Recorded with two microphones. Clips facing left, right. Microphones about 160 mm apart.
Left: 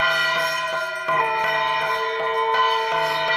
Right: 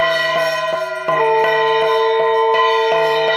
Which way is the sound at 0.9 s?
75° right (ahead or behind).